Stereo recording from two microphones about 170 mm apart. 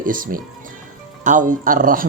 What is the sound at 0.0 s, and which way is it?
Speech, 55° right (ahead or behind).